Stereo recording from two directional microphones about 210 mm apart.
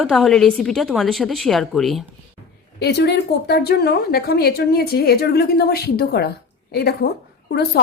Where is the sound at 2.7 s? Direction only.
50° left (ahead or behind).